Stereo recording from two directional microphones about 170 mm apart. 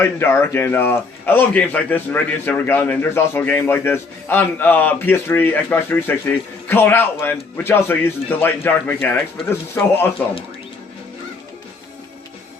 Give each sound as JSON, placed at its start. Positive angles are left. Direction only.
{"t": 0.0, "sound": "a man's voice", "side_deg": 15}